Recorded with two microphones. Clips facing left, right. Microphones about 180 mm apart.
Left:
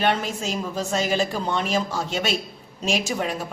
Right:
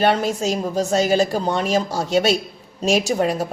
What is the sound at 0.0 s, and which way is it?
A woman's voice, 40° right (ahead or behind).